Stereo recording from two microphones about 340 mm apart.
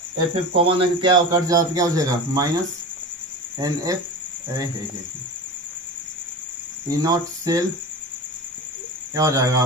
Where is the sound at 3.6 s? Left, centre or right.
Centre.